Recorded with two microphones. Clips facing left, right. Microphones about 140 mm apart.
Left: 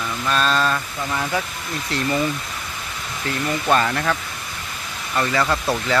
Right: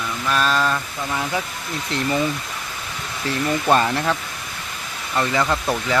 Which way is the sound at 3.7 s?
20° right (ahead or behind).